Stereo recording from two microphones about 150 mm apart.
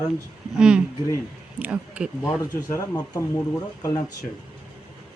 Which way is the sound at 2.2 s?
20° left (ahead or behind).